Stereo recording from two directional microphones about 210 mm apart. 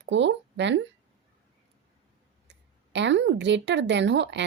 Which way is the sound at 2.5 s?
55° right (ahead or behind).